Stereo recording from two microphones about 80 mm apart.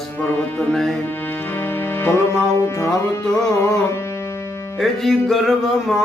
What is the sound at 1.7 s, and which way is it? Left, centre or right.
Music, left.